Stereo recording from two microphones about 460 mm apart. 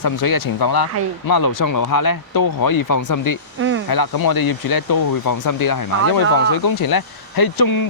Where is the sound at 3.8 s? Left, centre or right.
Left.